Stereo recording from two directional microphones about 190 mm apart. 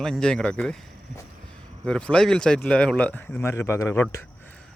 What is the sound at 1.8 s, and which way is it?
Speech, 5° left (ahead or behind).